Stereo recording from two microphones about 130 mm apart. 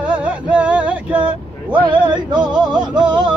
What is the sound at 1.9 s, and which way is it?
Music, 35° right (ahead or behind).